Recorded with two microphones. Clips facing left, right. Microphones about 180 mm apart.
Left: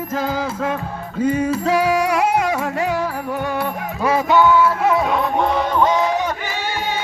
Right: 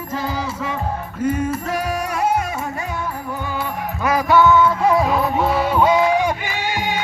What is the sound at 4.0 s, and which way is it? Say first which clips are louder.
Music: even; 25° left (ahead or behind).